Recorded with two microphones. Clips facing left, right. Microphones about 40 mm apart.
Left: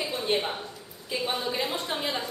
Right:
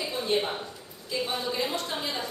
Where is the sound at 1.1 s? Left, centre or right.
Left.